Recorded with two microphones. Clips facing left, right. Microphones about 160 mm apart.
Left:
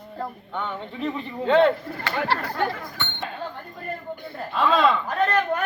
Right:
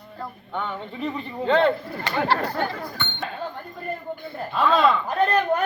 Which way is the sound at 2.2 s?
45° right (ahead or behind).